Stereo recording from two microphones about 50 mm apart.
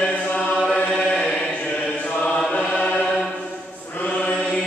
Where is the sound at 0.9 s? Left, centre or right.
Centre.